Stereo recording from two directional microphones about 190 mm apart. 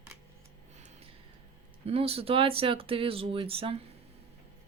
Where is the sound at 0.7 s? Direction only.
35° right (ahead or behind).